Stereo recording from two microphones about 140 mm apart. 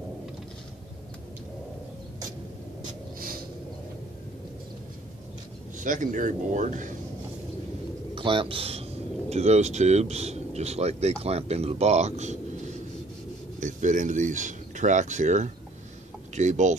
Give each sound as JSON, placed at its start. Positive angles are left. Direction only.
{"t": 5.8, "sound": "speech", "side_deg": -65}
{"t": 8.1, "sound": "speech", "side_deg": -35}
{"t": 13.6, "sound": "speech", "side_deg": -65}